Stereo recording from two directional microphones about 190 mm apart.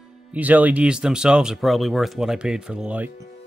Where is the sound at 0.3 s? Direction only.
10° right (ahead or behind).